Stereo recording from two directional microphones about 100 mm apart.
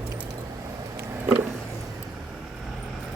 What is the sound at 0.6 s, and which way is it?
Vehicle, 35° right (ahead or behind).